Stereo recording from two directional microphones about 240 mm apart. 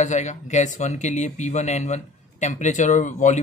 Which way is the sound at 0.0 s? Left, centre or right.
Left.